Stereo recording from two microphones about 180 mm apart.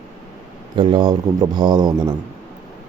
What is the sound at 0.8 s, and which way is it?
Speech, 25° right (ahead or behind).